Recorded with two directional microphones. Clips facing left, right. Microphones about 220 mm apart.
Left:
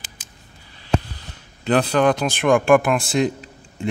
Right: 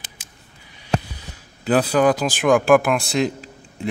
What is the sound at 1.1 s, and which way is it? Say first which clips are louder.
Speech: right 1 dB; 5° right (ahead or behind).